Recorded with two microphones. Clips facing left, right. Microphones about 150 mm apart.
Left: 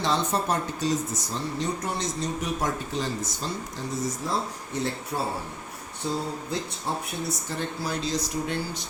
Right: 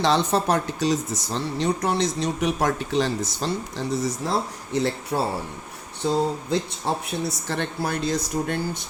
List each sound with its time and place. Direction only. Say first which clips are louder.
0.0 s speech: right 5 dB; 90° right
6.9 s speech: right 4 dB; 85° right
7.3 s speech: right 3 dB; 75° right (ahead or behind); by 8.8 s 55° right (ahead or behind)